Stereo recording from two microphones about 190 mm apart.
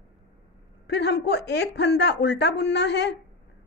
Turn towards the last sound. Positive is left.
turn(degrees=60)  # may be behind; listen again after turning